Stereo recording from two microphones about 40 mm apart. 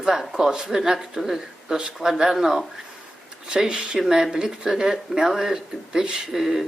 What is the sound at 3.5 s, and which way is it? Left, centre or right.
Speech, right.